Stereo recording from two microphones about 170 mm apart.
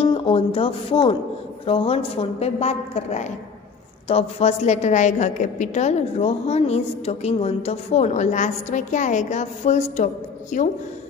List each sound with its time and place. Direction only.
0.0 s a woman's voice: 30° left (ahead or behind); by 10.7 s 50° left (ahead or behind)